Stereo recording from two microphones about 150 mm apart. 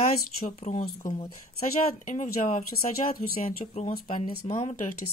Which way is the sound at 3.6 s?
45° left (ahead or behind).